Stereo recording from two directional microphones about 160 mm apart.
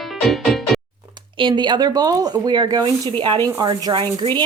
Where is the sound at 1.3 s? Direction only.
30° right (ahead or behind).